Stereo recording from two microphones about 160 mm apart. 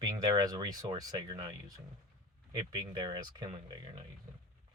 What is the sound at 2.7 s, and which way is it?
Speech, 25° right (ahead or behind).